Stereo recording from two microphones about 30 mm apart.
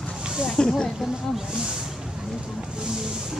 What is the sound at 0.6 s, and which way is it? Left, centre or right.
Speech, left.